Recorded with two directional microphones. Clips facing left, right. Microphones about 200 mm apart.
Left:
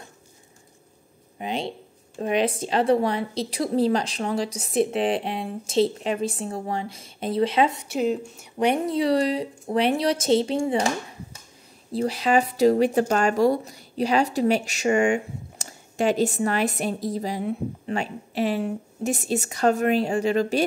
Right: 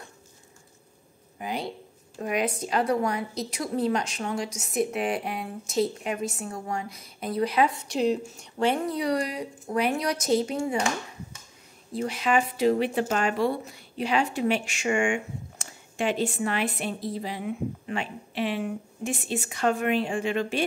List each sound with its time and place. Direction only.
1.4 s a woman's voice: 25° left (ahead or behind)
7.9 s speech: centre (ahead or behind)
8.5 s a woman's voice: 15° left (ahead or behind)
11.9 s speech: 35° left (ahead or behind)